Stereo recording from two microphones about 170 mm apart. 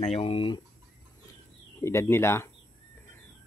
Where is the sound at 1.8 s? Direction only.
15° left (ahead or behind).